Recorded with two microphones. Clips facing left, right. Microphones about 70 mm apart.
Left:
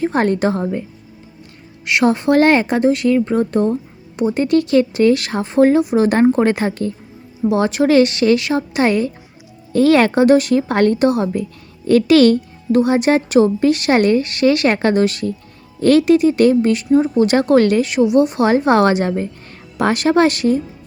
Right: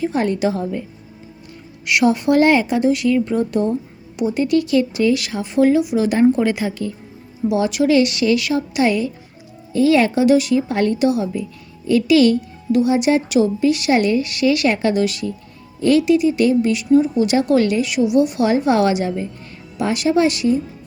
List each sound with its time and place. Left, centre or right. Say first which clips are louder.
0.0 s speech: left 3 dB; left
1.8 s a woman's voice: left 1 dB; left
9.7 s speech: left 3 dB; left